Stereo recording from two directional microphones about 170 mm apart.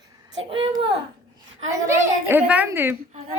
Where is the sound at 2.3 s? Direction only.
10° right (ahead or behind).